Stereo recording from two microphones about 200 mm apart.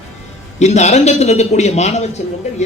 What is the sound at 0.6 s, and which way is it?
A man's voice, 35° left (ahead or behind).